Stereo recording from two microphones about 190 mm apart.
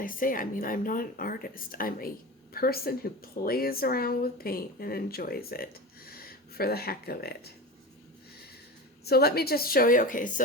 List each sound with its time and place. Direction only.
0.0 s speech: 45° left (ahead or behind)
9.0 s speech: 55° left (ahead or behind)